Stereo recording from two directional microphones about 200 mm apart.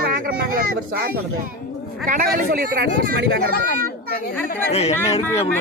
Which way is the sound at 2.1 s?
45° right (ahead or behind).